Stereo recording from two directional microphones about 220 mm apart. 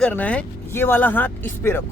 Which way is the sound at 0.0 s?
5° left (ahead or behind).